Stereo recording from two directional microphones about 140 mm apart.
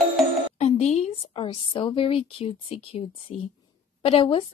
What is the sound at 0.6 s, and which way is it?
Speech, 50° left (ahead or behind).